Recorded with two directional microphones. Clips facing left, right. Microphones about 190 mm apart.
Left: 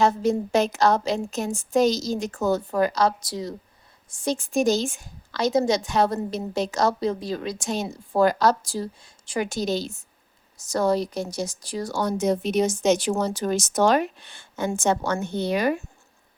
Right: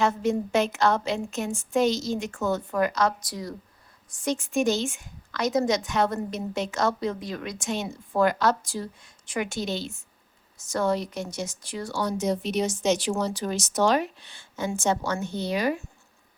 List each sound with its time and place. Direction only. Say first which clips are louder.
0.0 s a woman's voice: left 3 dB; 35° left (ahead or behind); by 15.8 s 55° left (ahead or behind)